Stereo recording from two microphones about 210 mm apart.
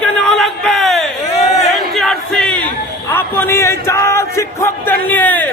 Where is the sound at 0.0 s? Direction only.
Centre (ahead or behind).